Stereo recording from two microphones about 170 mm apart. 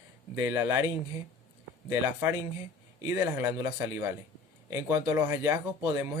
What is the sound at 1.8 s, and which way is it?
Speech, 15° right (ahead or behind).